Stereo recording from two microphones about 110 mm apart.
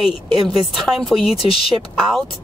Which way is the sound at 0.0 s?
5° right (ahead or behind).